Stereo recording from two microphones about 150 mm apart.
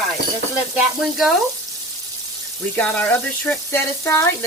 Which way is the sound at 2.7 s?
10° left (ahead or behind).